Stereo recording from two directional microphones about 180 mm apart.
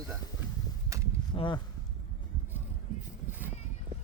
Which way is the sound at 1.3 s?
25° left (ahead or behind).